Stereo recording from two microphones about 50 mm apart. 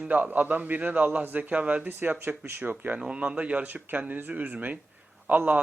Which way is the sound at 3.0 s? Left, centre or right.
Centre.